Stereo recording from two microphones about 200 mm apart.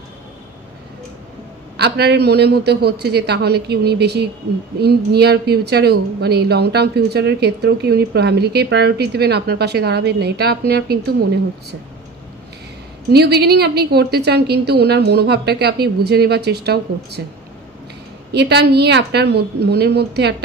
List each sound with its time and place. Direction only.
1.8 s a woman's voice: 55° right (ahead or behind)
13.1 s a woman's voice: 55° right (ahead or behind)
18.3 s a woman's voice: 55° right (ahead or behind)